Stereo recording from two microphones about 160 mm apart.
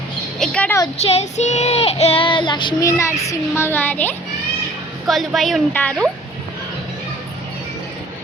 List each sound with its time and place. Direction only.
0.3 s speech: 5° left (ahead or behind)
1.1 s child singing: 45° left (ahead or behind)
2.8 s a child's voice: 20° left (ahead or behind)
5.0 s a woman's voice: centre (ahead or behind)